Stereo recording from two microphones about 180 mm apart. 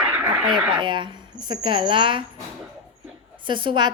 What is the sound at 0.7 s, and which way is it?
A woman's voice, 25° right (ahead or behind).